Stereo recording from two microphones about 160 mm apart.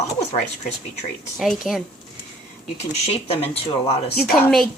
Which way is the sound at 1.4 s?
Centre (ahead or behind).